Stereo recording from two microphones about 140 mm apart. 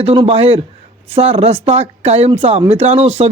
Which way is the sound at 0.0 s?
45° right (ahead or behind).